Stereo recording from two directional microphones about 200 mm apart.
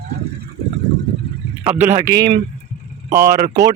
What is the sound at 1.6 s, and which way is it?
A man's voice, 10° right (ahead or behind).